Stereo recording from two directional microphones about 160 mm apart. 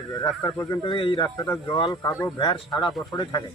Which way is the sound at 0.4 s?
20° left (ahead or behind).